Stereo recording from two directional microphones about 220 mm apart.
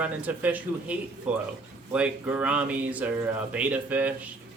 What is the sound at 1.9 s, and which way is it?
Speech, 5° right (ahead or behind).